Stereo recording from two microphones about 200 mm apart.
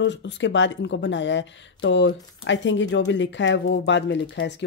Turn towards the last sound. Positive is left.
turn(degrees=60)  # may be behind; listen again after turning